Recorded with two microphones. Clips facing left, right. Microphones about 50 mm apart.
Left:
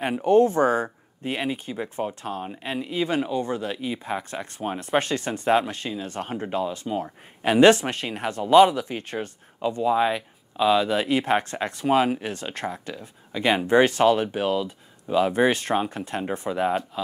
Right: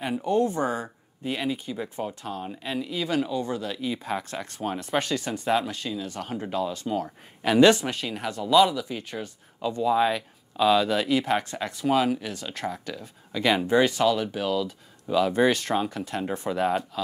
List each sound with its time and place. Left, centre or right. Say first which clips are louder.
0.2 s speech: left 7 dB; left
1.2 s speech: left 1 dB; left
4.7 s speech: left 4 dB; left
9.9 s speech: left 1 dB; centre
16.4 s speech: left 1 dB; centre